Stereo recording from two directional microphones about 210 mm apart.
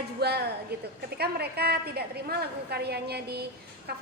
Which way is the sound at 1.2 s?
50° right (ahead or behind).